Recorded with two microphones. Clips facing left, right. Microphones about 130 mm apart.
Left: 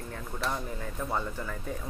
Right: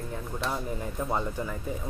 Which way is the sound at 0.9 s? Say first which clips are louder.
Right 2 dB; 20° right (ahead or behind).